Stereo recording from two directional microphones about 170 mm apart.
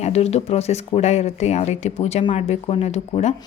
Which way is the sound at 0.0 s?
40° left (ahead or behind).